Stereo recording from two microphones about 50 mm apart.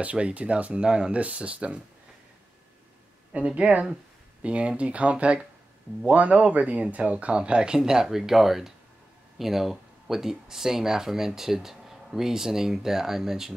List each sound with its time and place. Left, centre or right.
0.0 s speech: right
3.3 s speech: right; by 13.6 s centre